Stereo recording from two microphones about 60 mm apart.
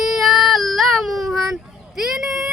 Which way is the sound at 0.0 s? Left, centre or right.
Centre.